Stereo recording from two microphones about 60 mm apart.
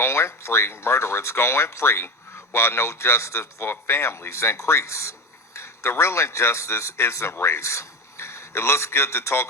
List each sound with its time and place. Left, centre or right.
0.0 s a man's voice: left